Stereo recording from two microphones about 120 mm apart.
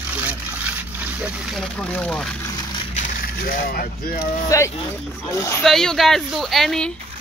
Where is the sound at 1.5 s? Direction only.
10° left (ahead or behind).